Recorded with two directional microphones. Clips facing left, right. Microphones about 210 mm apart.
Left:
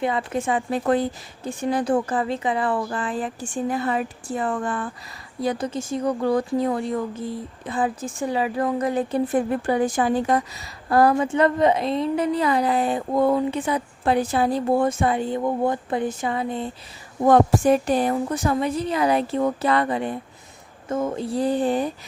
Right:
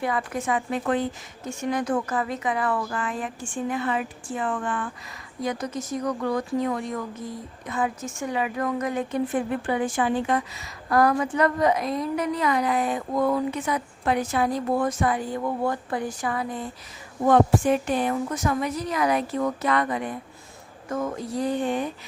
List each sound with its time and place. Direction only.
0.0 s speech: 25° left (ahead or behind)
17.2 s speech: 40° left (ahead or behind)